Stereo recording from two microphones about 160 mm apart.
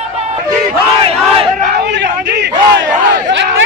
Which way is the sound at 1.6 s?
80° right.